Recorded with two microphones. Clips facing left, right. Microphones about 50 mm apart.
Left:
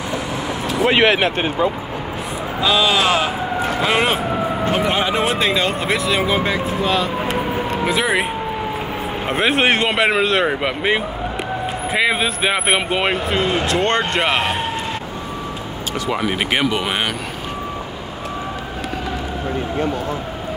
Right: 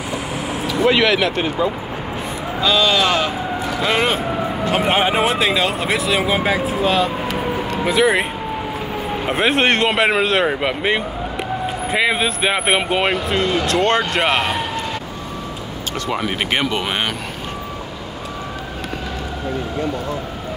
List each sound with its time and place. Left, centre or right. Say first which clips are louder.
0.8 s speech: left 1 dB; left
2.6 s speech: even; centre
4.7 s speech: right 4 dB; right
5.2 s speech: right 1 dB; centre
9.3 s speech: even; centre
16.1 s speech: left 1 dB; centre